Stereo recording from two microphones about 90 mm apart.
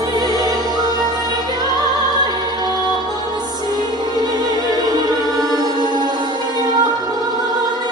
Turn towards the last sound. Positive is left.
turn(degrees=-45)  # may be behind; listen again after turning